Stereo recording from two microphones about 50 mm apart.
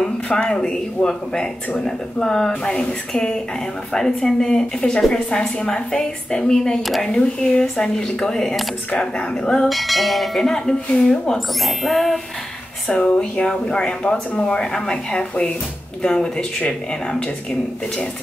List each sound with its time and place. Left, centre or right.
0.3 s speech: centre
9.7 s bell: centre
12.8 s speech: centre